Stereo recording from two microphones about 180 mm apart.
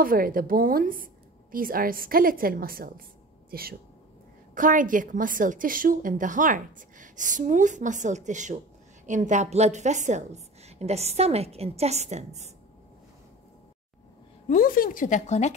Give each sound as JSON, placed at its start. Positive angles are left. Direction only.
{"t": 0.0, "sound": "a woman's voice", "side_deg": -50}
{"t": 14.5, "sound": "speech", "side_deg": 50}